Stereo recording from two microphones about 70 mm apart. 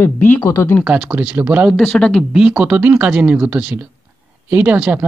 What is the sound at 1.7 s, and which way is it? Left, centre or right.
Speech, centre.